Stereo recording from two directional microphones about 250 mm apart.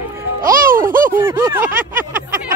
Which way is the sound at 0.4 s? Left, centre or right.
Right.